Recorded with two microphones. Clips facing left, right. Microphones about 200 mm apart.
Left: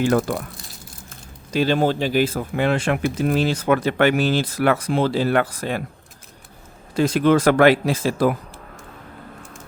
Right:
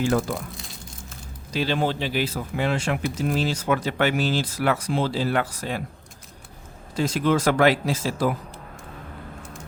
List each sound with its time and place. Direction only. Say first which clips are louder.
0.0 s speech: left 4 dB; 60° left (ahead or behind)
0.5 s crumpling: right 1 dB; centre (ahead or behind)
1.5 s speech: left 5 dB; 45° left (ahead or behind)
6.9 s speech: left 5 dB; 60° left (ahead or behind)